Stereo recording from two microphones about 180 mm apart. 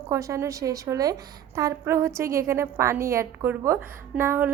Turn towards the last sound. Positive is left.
turn(degrees=-10)  # may be behind; listen again after turning